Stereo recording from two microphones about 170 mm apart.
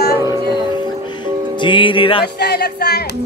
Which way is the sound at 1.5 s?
30° left (ahead or behind).